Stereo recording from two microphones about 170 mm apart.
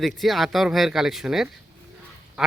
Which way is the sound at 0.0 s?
Centre (ahead or behind).